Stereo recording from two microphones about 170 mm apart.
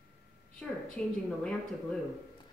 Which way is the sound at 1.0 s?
5° left (ahead or behind).